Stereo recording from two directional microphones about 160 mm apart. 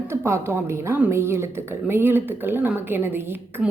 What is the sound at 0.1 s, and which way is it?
A woman's voice, 15° right (ahead or behind).